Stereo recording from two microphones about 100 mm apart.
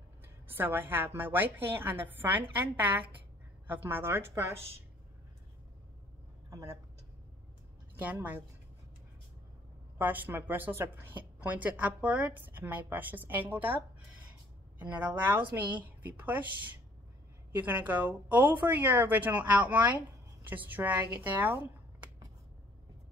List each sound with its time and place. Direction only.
0.2 s a woman's voice: 20° right (ahead or behind)
6.5 s a woman's voice: 30° right (ahead or behind)
7.9 s a woman's voice: 15° right (ahead or behind)
9.9 s speech: 15° right (ahead or behind)
15.5 s speech: 15° right (ahead or behind)